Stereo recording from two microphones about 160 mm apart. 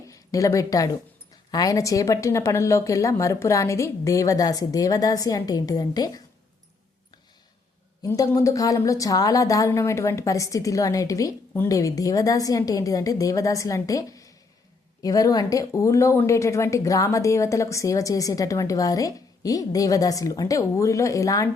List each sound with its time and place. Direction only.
0.1 s a woman's voice: 20° left (ahead or behind)
8.0 s a woman's voice: 20° left (ahead or behind)